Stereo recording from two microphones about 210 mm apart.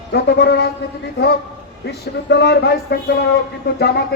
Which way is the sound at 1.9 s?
50° left (ahead or behind).